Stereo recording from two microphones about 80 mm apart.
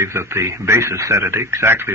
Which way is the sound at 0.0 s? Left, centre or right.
Right.